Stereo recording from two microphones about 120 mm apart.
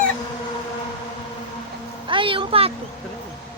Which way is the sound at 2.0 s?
45° right (ahead or behind).